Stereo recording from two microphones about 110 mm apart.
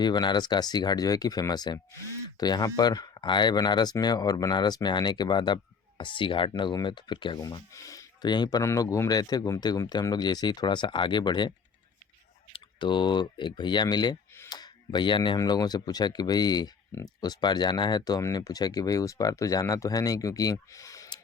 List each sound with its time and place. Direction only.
0.0 s speech: 40° left (ahead or behind)
7.4 s speech: 30° left (ahead or behind)
12.5 s speech: 45° left (ahead or behind)
15.4 s speech: 35° left (ahead or behind)